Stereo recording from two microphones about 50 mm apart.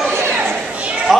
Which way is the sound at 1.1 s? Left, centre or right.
Centre.